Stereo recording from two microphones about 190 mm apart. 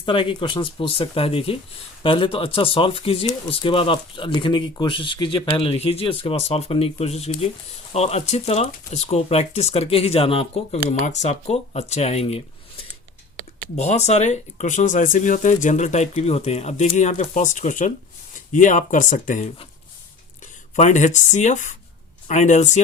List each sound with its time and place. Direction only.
0.0 s speech: 25° left (ahead or behind)
13.7 s speech: 35° left (ahead or behind)